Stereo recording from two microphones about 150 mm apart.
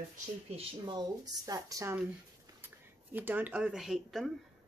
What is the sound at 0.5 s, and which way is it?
Speech, 40° right (ahead or behind).